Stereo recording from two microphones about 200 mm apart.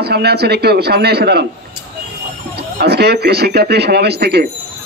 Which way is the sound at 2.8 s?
55° right (ahead or behind).